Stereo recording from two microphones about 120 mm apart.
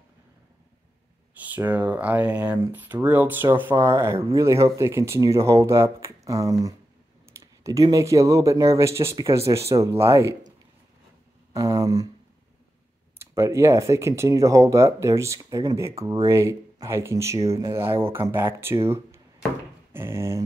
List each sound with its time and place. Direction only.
1.3 s speech: 15° right (ahead or behind)
11.5 s a sound: 30° right (ahead or behind)
13.2 s speech: 25° right (ahead or behind)